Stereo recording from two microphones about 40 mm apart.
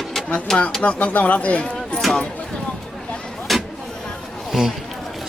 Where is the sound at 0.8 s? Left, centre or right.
Left.